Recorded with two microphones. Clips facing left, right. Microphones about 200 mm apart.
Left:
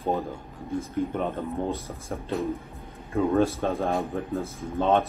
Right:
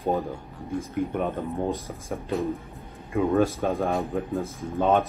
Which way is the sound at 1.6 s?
15° right (ahead or behind).